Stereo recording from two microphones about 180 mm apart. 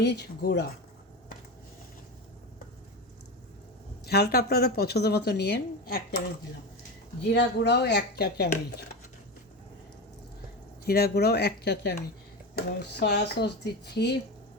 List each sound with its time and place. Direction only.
0.0 s speech: 65° left (ahead or behind)
4.0 s speech: 65° left (ahead or behind)
7.3 s speech: 65° left (ahead or behind)
10.8 s speech: 60° left (ahead or behind)
13.0 s speech: 70° left (ahead or behind)